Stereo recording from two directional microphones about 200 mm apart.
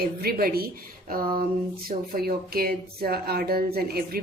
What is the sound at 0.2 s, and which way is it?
Speech, 50° right (ahead or behind).